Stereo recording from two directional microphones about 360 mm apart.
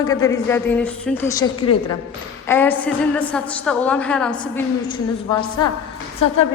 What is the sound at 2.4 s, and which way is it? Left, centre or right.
A woman's voice, centre.